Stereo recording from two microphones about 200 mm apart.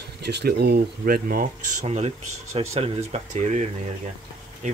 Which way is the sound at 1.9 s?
30° right (ahead or behind).